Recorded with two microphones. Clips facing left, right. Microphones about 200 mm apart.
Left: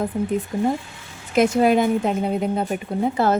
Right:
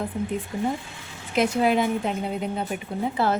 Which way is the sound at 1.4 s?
45° left (ahead or behind).